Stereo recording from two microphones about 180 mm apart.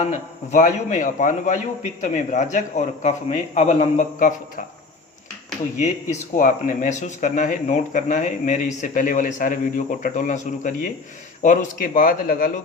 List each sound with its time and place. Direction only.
0.0 s speech: 40° left (ahead or behind)
5.7 s speech: 40° left (ahead or behind)